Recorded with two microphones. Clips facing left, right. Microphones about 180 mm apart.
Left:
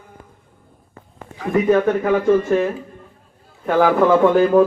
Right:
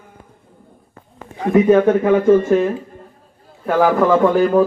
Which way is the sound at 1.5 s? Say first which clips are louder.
Right 4 dB; 20° right (ahead or behind).